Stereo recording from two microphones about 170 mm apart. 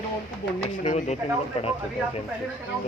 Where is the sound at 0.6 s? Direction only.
45° left (ahead or behind).